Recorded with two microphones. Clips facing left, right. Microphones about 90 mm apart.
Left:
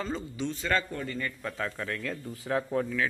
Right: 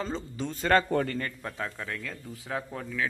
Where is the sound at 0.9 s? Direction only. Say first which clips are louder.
Right 8 dB; 75° right (ahead or behind).